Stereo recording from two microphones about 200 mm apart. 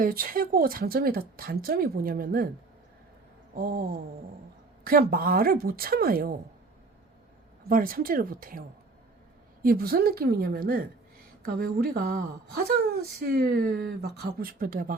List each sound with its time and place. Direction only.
0.0 s speech: 45° right (ahead or behind)
3.5 s speech: 45° right (ahead or behind)
7.7 s speech: 45° right (ahead or behind)
9.6 s speech: 50° right (ahead or behind)